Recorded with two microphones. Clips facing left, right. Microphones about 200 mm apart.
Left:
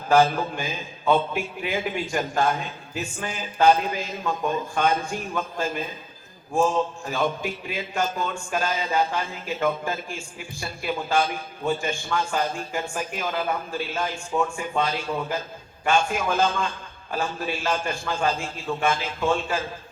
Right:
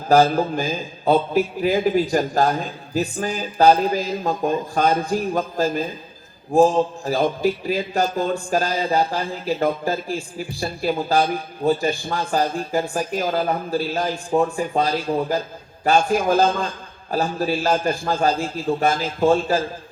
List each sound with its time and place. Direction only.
0.1 s a man's voice: 35° right (ahead or behind)